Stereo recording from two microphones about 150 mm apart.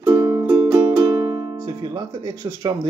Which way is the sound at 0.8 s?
25° right (ahead or behind).